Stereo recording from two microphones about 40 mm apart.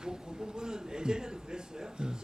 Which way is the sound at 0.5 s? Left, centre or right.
Centre.